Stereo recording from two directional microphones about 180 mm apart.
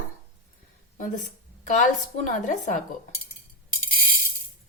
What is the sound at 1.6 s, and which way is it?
Speech, 45° left (ahead or behind).